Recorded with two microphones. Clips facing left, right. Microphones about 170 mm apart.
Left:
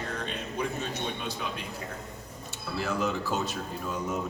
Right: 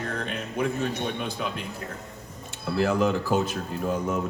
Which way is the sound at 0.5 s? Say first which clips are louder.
Right 6 dB; 55° right (ahead or behind).